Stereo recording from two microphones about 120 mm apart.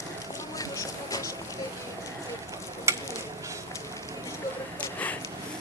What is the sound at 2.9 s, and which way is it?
Stir, 25° right (ahead or behind).